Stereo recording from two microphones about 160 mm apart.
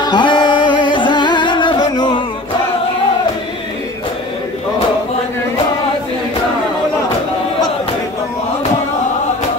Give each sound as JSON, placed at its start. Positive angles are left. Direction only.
{"t": 0.0, "sound": "music", "side_deg": 30}